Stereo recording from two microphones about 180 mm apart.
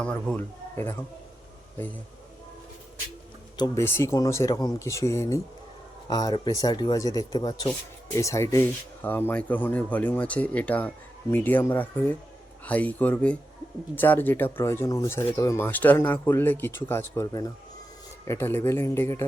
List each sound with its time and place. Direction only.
0.0 s speech: 5° left (ahead or behind)
3.6 s speech: 15° left (ahead or behind)